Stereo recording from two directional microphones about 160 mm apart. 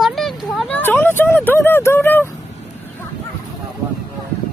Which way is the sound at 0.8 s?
15° left (ahead or behind).